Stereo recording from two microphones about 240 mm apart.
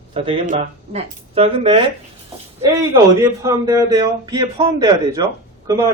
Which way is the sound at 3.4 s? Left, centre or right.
Centre.